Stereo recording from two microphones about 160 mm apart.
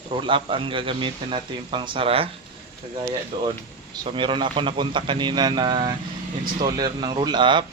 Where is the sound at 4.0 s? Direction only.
30° right (ahead or behind).